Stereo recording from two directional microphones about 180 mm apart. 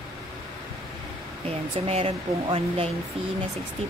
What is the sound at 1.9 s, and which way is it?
Speech, 35° right (ahead or behind).